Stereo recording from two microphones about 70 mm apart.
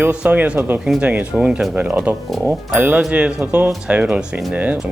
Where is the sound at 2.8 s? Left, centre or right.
Right.